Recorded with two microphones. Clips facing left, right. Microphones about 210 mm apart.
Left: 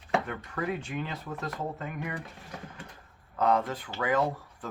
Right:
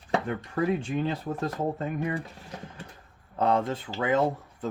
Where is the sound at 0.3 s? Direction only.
30° right (ahead or behind).